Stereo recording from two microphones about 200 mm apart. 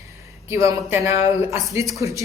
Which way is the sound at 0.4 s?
15° right (ahead or behind).